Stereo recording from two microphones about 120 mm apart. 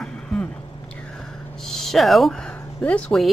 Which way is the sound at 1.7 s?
5° left (ahead or behind).